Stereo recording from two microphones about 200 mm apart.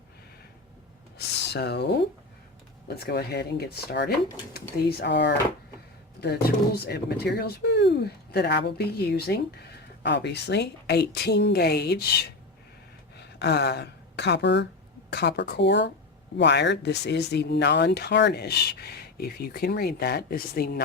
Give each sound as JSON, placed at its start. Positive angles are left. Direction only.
{"t": 1.5, "sound": "a woman's voice", "side_deg": 55}